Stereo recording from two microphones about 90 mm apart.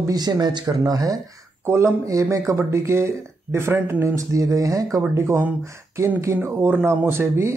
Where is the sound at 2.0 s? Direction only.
35° right (ahead or behind).